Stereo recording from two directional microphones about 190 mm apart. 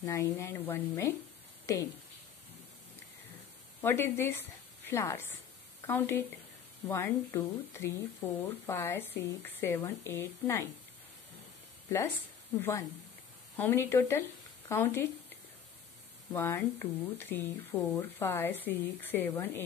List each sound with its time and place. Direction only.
0.0 s speech: 15° left (ahead or behind)
3.8 s a woman's voice: 10° left (ahead or behind)
13.6 s speech: 10° left (ahead or behind)
16.3 s speech: 10° left (ahead or behind)